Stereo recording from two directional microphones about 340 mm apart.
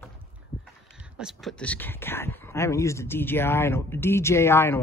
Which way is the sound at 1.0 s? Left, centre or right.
Centre.